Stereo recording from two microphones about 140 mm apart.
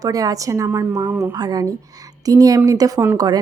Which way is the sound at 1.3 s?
25° right (ahead or behind).